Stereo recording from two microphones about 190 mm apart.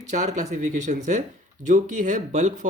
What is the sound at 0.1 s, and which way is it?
Speech, 40° right (ahead or behind).